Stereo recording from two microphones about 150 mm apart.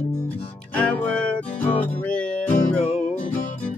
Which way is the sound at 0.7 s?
10° left (ahead or behind).